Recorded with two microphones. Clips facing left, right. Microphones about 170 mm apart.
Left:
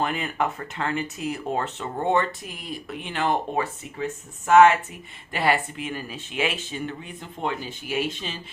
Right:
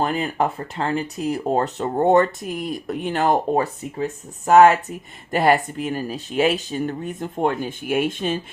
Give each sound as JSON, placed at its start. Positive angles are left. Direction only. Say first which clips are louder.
{"t": 0.0, "sound": "speech", "louder": "right 4 dB", "side_deg": -35}